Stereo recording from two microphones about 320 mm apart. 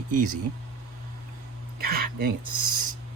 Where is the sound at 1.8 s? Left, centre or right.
Right.